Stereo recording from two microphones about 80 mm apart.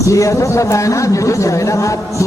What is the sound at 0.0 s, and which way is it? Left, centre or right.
A man's voice, left.